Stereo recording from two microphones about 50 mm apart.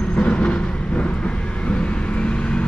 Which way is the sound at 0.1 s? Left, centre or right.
Left.